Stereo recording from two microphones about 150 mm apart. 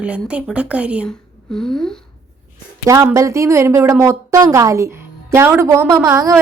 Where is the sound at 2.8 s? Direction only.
20° right (ahead or behind).